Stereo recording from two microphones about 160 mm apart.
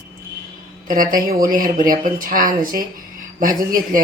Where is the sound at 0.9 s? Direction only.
60° right (ahead or behind).